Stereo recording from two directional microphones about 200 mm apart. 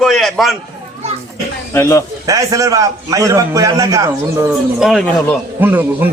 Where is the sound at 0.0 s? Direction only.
Centre (ahead or behind).